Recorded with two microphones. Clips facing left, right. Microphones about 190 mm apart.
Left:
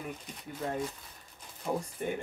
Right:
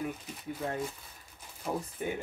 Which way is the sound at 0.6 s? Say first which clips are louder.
Left 2 dB; centre (ahead or behind).